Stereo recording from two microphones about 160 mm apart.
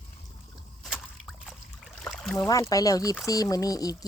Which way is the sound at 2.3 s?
20° left (ahead or behind).